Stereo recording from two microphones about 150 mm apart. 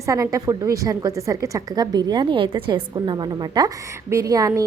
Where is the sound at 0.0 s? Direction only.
20° right (ahead or behind).